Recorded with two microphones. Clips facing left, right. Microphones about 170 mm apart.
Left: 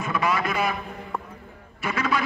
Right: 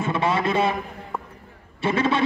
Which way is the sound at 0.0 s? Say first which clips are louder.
Right 3 dB; 25° right (ahead or behind).